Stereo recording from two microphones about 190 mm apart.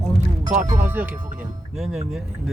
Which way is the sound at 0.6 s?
15° right (ahead or behind).